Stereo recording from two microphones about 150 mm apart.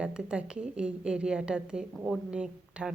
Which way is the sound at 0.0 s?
5° right (ahead or behind).